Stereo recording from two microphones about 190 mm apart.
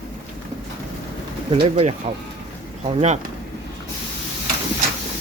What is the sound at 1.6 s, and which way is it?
Speech, 35° right (ahead or behind).